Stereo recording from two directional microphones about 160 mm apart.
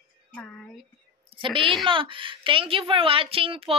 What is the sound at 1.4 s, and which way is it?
Speech, 30° right (ahead or behind).